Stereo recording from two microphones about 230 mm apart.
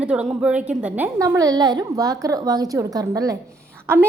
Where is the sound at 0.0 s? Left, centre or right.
Centre.